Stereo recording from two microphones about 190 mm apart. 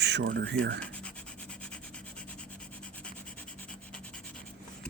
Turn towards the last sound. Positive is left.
turn(degrees=5)  # may be behind; listen again after turning